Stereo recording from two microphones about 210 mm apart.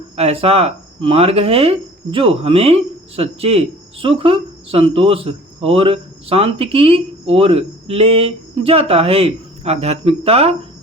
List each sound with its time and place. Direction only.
0.2 s speech: 30° right (ahead or behind)